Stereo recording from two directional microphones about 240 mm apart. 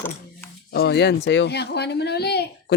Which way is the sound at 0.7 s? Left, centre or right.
Left.